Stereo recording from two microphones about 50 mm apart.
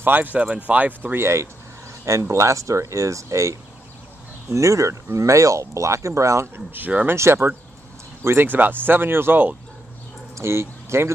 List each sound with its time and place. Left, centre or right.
0.0 s speech: right
1.1 s speech: right
2.0 s speech: right
6.4 s speech: right
8.4 s speech: right
10.3 s speech: right